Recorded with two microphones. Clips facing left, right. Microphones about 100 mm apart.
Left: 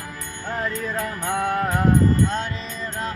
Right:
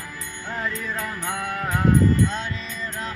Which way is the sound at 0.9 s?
45° left (ahead or behind).